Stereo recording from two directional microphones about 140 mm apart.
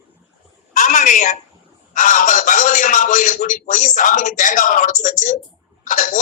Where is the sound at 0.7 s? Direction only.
65° left (ahead or behind).